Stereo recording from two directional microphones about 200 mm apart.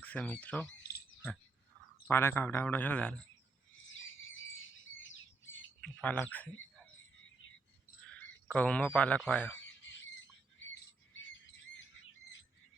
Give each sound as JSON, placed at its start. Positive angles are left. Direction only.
{"t": 0.0, "sound": "speech", "side_deg": 5}
{"t": 2.0, "sound": "speech", "side_deg": 10}
{"t": 3.9, "sound": "bird", "side_deg": 75}
{"t": 5.8, "sound": "speech", "side_deg": 5}
{"t": 8.0, "sound": "speech", "side_deg": 5}
{"t": 9.6, "sound": "bird", "side_deg": 65}